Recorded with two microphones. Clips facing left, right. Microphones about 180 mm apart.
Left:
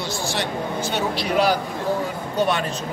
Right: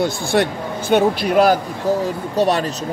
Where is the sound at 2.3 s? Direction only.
35° right (ahead or behind).